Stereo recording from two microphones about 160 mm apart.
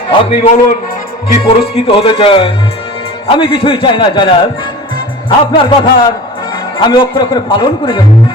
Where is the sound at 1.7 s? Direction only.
35° left (ahead or behind).